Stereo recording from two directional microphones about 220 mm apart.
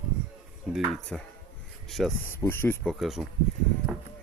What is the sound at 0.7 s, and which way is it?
Speech, centre (ahead or behind).